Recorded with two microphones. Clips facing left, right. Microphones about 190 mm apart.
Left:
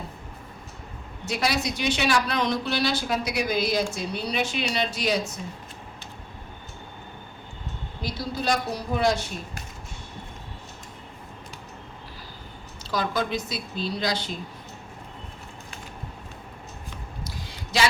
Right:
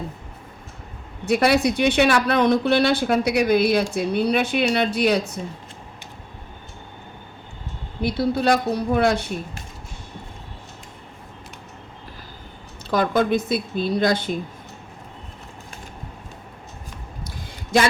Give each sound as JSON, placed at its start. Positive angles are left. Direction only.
{"t": 1.2, "sound": "speech", "side_deg": -55}
{"t": 8.0, "sound": "speech", "side_deg": -60}
{"t": 12.9, "sound": "speech", "side_deg": -55}
{"t": 17.2, "sound": "a sound", "side_deg": -50}